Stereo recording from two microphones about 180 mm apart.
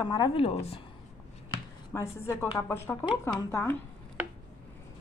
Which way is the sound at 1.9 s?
15° left (ahead or behind).